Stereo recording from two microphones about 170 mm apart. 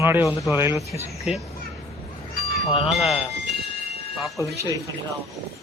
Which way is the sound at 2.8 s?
Centre (ahead or behind).